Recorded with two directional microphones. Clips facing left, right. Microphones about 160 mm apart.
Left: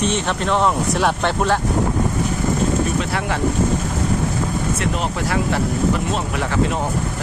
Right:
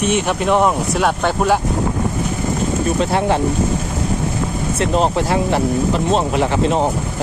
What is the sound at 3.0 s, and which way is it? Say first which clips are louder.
Speech: right 7 dB; 25° right (ahead or behind).